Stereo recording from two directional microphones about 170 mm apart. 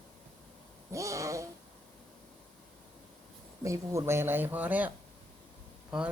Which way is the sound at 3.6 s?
20° right (ahead or behind).